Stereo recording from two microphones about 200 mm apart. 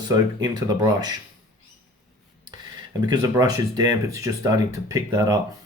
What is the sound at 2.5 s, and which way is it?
Speech, 20° right (ahead or behind).